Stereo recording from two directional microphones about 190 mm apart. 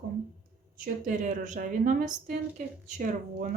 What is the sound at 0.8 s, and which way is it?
A woman's voice, 45° right (ahead or behind).